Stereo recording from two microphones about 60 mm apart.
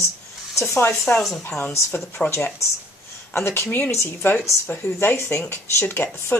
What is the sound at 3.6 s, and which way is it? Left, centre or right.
Speech, left.